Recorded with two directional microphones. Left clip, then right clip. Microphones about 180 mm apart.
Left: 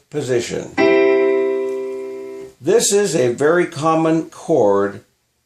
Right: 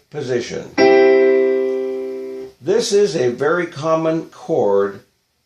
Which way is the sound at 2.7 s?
55° left (ahead or behind).